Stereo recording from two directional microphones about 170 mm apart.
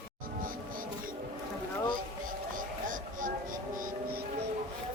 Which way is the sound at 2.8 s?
50° right (ahead or behind).